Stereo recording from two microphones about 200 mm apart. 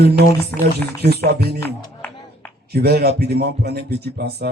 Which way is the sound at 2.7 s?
50° right (ahead or behind).